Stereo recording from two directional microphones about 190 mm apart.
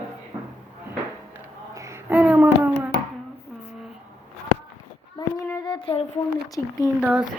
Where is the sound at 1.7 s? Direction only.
15° right (ahead or behind).